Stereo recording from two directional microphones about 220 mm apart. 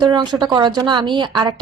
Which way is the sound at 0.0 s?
20° right (ahead or behind).